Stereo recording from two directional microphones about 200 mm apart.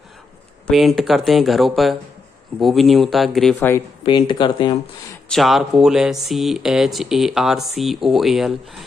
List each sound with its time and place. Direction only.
0.7 s speech: centre (ahead or behind)
3.5 s speech: 15° left (ahead or behind)
4.0 s speech: 25° left (ahead or behind)
5.3 s speech: centre (ahead or behind)